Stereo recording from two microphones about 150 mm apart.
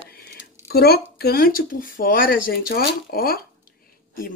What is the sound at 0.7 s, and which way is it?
Speech, 90° left.